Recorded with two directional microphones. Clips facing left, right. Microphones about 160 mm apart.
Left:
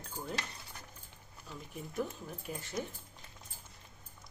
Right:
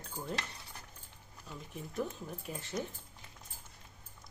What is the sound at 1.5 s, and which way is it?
Speech, centre (ahead or behind).